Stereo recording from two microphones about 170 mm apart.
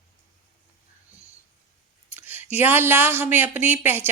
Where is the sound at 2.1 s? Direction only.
10° right (ahead or behind).